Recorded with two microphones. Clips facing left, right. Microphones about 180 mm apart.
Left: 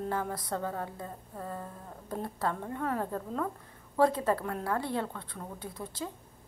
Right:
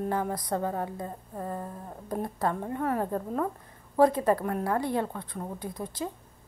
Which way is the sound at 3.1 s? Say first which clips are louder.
Right 4 dB; 25° right (ahead or behind).